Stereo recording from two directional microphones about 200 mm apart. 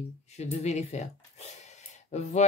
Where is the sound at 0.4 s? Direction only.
35° left (ahead or behind).